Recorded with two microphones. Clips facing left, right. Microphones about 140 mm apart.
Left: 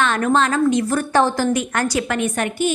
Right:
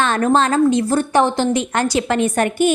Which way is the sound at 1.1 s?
20° right (ahead or behind).